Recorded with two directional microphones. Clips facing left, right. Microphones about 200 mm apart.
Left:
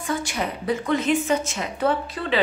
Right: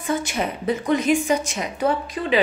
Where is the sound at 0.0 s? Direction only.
20° right (ahead or behind).